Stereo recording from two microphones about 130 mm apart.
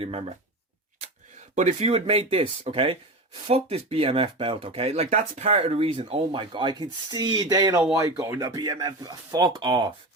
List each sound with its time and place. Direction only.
0.0 s speech: 50° right (ahead or behind)
1.5 s speech: 60° right (ahead or behind); by 9.9 s 35° right (ahead or behind)